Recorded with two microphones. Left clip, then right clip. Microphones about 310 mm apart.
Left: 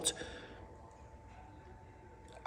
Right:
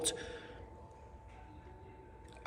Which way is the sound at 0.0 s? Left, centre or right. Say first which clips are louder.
Right 1 dB; left.